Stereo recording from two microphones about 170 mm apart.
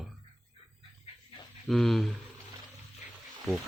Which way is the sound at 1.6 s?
Centre (ahead or behind).